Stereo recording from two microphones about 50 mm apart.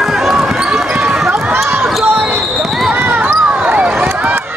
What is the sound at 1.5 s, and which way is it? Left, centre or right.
Basketball bounce, right.